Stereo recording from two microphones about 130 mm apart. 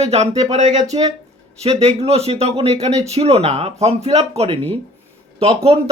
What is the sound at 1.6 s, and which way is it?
Speech, 55° right (ahead or behind).